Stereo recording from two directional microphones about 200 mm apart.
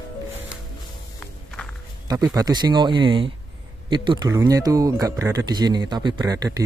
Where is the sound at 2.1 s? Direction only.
15° right (ahead or behind).